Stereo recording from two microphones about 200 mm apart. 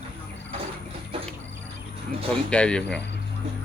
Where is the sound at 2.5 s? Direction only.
5° left (ahead or behind).